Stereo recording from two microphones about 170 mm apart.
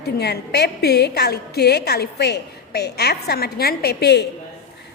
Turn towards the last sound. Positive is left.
turn(degrees=75)  # may be behind; listen again after turning